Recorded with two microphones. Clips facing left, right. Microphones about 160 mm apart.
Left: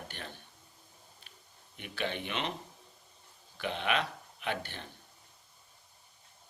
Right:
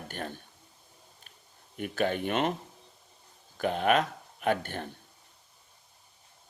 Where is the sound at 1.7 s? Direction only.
45° right (ahead or behind).